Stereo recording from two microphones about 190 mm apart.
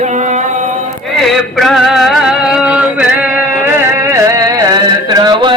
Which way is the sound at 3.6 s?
15° right (ahead or behind).